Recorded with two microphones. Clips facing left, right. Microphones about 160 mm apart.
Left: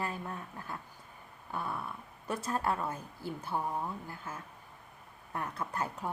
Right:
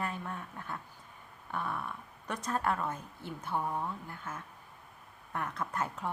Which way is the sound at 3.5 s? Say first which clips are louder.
Right 1 dB; 5° left (ahead or behind).